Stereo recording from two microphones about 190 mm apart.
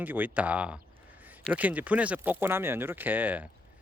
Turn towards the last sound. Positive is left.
turn(degrees=-10)  # may be behind; listen again after turning